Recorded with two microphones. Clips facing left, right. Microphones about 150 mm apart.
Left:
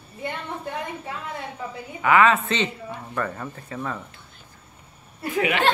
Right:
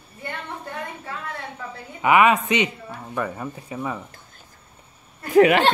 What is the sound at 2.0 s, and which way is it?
Speech, 15° right (ahead or behind).